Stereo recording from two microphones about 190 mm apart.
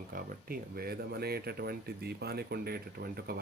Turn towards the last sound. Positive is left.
turn(degrees=-55)  # may be behind; listen again after turning